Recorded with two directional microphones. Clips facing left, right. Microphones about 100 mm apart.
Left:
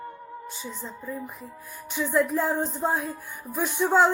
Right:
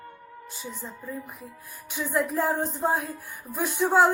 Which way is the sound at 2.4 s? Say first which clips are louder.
Even; 10° right (ahead or behind).